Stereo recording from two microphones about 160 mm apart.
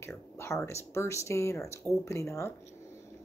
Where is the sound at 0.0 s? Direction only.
15° left (ahead or behind).